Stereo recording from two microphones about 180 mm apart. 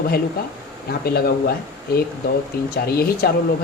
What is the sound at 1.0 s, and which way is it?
Speech, 60° left (ahead or behind).